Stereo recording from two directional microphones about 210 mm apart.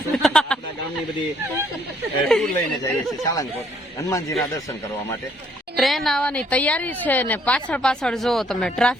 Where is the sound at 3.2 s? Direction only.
15° left (ahead or behind).